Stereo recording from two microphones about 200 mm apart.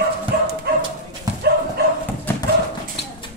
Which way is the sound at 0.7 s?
50° right (ahead or behind).